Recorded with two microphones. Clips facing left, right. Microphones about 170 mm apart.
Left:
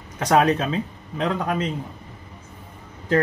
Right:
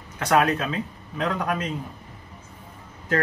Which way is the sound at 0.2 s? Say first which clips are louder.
Left 3 dB; 35° left (ahead or behind).